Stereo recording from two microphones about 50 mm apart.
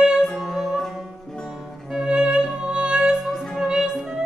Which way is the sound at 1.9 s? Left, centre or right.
Centre.